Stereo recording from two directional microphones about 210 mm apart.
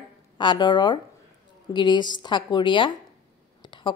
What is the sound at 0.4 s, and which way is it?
A woman's voice, 20° left (ahead or behind).